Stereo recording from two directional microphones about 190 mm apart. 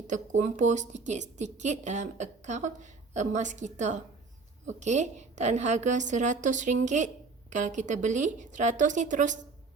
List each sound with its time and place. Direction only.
0.1 s a woman's voice: 40° right (ahead or behind)